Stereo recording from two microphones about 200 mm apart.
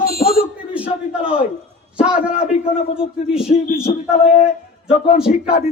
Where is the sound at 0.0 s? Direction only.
50° left (ahead or behind).